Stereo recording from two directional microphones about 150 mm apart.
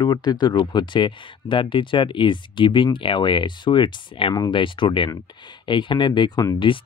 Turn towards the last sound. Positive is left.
turn(degrees=25)  # may be behind; listen again after turning